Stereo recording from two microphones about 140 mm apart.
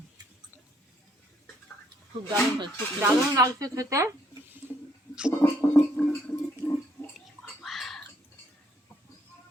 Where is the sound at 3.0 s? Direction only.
25° right (ahead or behind).